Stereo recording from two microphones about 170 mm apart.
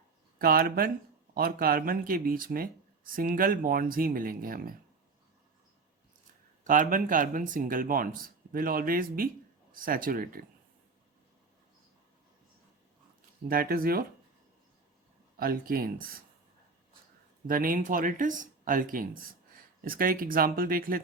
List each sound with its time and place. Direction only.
0.3 s speech: 60° right (ahead or behind)
6.7 s speech: 50° right (ahead or behind)
13.5 s speech: 60° right (ahead or behind)
15.4 s speech: 60° right (ahead or behind)
17.4 s speech: 55° right (ahead or behind)